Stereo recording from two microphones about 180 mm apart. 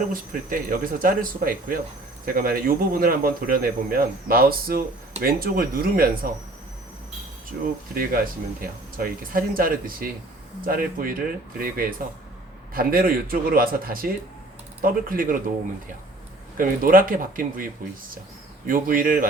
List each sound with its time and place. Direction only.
0.1 s speech: 50° right (ahead or behind)
7.5 s speech: 60° right (ahead or behind)
16.6 s speech: 50° right (ahead or behind)
18.7 s speech: 50° right (ahead or behind)